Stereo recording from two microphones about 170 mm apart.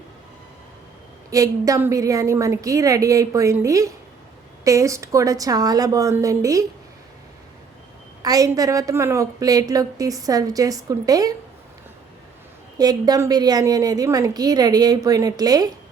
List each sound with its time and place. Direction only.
1.3 s a woman's voice: 20° right (ahead or behind)
8.2 s a woman's voice: 20° right (ahead or behind)
12.8 s a woman's voice: 20° right (ahead or behind)